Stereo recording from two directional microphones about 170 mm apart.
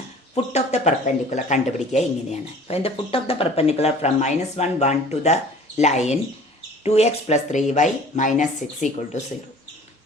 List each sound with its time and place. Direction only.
0.3 s speech: 40° left (ahead or behind)